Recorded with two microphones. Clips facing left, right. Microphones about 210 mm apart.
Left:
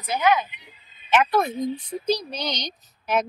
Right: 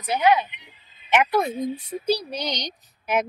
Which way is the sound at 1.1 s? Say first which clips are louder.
Even; 15° right (ahead or behind).